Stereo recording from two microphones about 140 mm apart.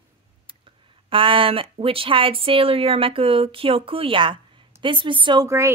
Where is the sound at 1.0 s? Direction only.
40° right (ahead or behind).